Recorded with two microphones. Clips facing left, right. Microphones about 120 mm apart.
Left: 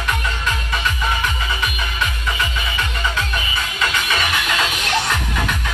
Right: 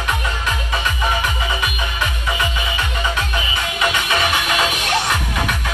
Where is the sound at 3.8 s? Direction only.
15° right (ahead or behind).